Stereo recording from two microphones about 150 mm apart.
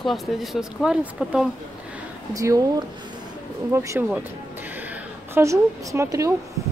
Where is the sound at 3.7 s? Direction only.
20° right (ahead or behind).